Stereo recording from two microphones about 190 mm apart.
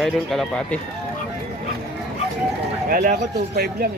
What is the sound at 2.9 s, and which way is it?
Speech, 50° right (ahead or behind).